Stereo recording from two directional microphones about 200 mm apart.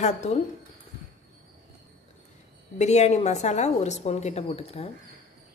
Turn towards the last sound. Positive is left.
turn(degrees=30)  # may be behind; listen again after turning